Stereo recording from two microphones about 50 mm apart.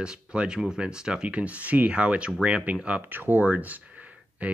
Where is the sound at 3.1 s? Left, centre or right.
Right.